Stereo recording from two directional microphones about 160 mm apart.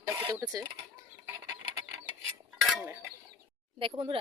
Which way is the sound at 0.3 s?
15° right (ahead or behind).